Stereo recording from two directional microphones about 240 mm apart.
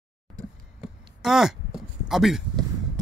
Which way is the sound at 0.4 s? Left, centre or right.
Centre.